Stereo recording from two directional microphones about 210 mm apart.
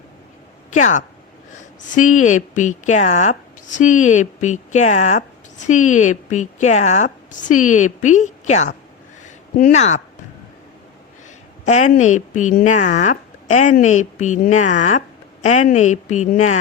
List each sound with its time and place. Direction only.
0.7 s speech: 35° left (ahead or behind)
9.2 s a sound: 35° left (ahead or behind)
11.6 s speech: 35° left (ahead or behind)